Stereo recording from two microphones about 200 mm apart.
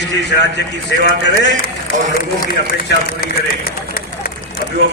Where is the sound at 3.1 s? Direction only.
45° left (ahead or behind).